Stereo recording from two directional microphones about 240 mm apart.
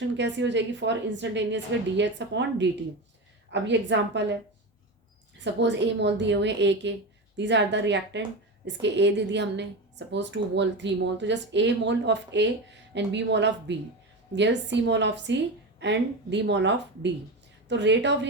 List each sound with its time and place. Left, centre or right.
0.0 s speech: right
5.4 s speech: right